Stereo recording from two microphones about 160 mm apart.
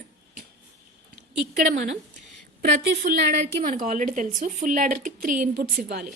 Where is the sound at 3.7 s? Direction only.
50° right (ahead or behind).